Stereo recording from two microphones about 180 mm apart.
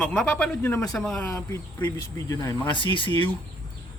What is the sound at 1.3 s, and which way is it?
Speech, 15° left (ahead or behind).